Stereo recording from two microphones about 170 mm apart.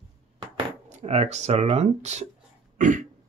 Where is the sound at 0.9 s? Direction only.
40° right (ahead or behind).